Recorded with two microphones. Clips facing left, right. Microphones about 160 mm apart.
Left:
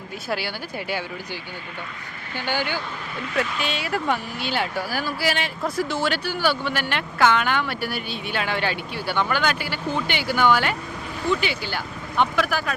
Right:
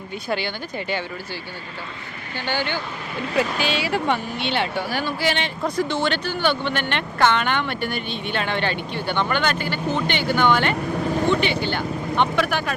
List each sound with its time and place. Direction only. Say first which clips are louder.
0.3 s speech: right 2 dB; 5° left (ahead or behind)
2.3 s speech: right 1 dB; 10° left (ahead or behind)
3.3 s speech: right 4 dB; centre (ahead or behind)
11.3 s speech: right 1 dB; 25° right (ahead or behind)
11.6 s speech: right 6 dB; 5° left (ahead or behind)